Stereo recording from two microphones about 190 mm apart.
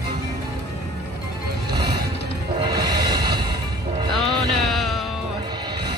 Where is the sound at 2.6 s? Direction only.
20° right (ahead or behind).